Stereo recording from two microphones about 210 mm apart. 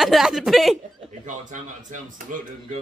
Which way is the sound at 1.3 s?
35° right (ahead or behind).